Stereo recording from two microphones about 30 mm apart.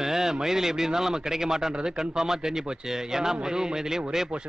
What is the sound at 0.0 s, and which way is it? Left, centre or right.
A man's voice, centre.